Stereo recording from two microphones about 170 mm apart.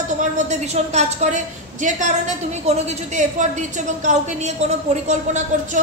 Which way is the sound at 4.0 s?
45° right (ahead or behind).